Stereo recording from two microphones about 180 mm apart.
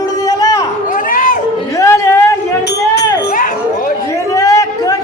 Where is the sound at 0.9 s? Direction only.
50° left (ahead or behind).